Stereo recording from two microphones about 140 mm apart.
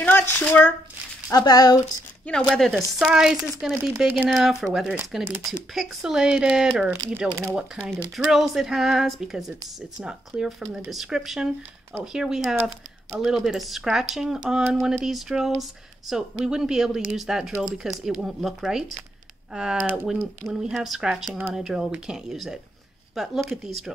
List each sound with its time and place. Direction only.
0.0 s speech: 15° left (ahead or behind)
1.3 s speech: 25° left (ahead or behind)
2.5 s speech: centre (ahead or behind)
20.4 s speech: 5° right (ahead or behind)